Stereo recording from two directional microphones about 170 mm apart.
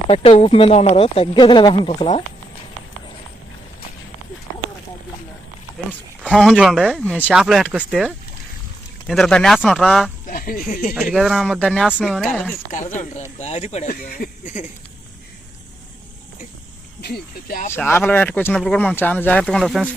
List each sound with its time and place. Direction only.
0.1 s speech: 35° left (ahead or behind)
6.2 s speech: centre (ahead or behind)
10.2 s speech: 55° left (ahead or behind)
11.1 s speech: centre (ahead or behind)
12.3 s speech: 10° left (ahead or behind)
12.7 s speech: 45° left (ahead or behind)
13.9 s speech: 60° left (ahead or behind)
17.0 s speech: 65° left (ahead or behind)
17.7 s speech: 15° left (ahead or behind)